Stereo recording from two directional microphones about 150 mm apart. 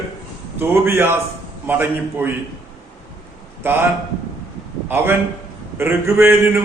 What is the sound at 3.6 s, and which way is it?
Speech, 15° right (ahead or behind).